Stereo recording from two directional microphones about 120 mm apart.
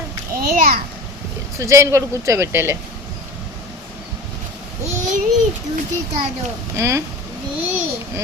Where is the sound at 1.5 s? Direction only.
25° right (ahead or behind).